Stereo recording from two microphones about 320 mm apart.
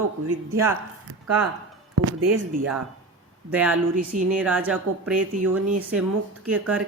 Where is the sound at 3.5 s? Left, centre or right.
Centre.